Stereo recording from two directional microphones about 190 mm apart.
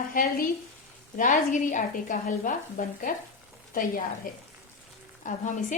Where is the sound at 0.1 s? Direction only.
50° left (ahead or behind).